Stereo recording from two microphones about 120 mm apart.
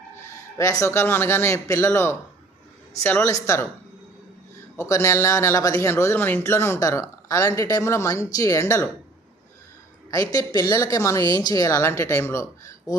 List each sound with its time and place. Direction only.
0.3 s speech: 25° left (ahead or behind)
3.2 s speech: 25° left (ahead or behind)
4.8 s speech: 25° left (ahead or behind)
10.1 s speech: 30° left (ahead or behind)